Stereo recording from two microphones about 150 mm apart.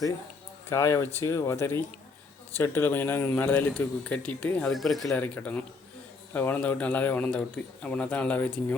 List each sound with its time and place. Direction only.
0.7 s speech: 20° left (ahead or behind); by 5.0 s centre (ahead or behind)
5.0 s speech: 10° left (ahead or behind)